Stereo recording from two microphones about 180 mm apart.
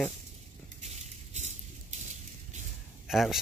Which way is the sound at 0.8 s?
35° right (ahead or behind).